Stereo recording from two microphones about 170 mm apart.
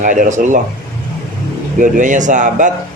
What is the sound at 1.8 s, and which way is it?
Speech, 50° right (ahead or behind).